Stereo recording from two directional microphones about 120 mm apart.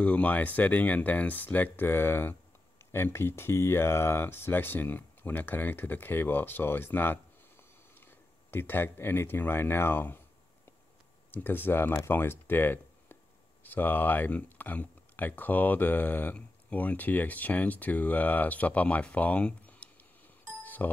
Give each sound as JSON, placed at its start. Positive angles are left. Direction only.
{"t": 0.0, "sound": "speech", "side_deg": 10}
{"t": 8.5, "sound": "speech", "side_deg": 15}
{"t": 20.6, "sound": "music", "side_deg": 15}